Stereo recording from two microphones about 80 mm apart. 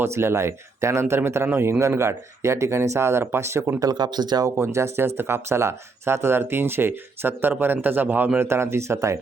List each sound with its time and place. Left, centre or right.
0.0 s speech: right
3.8 s speech: right
4.5 s speech: right